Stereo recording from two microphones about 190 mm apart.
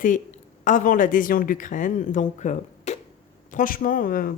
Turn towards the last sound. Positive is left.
turn(degrees=50)  # may be behind; listen again after turning